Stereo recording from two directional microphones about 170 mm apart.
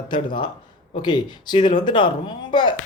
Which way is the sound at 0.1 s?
30° left (ahead or behind).